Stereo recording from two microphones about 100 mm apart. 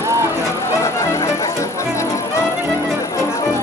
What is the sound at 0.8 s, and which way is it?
Music, 30° left (ahead or behind).